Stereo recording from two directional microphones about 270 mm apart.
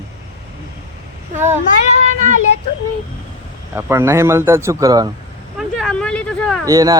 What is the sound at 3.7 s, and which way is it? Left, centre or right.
Speech, centre.